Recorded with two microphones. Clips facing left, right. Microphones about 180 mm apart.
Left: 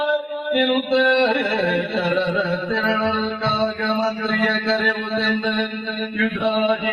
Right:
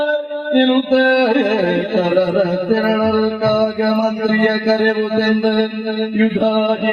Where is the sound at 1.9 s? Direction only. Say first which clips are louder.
Right 10 dB; 40° right (ahead or behind).